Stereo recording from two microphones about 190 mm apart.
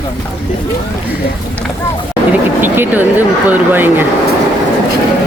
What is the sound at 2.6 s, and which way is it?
Speech, 10° right (ahead or behind).